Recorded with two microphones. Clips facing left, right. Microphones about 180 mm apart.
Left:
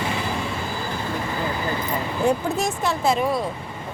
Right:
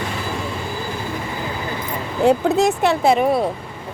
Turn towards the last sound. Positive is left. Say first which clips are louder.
# right 5 dB
turn(degrees=-60)  # may be behind; listen again after turning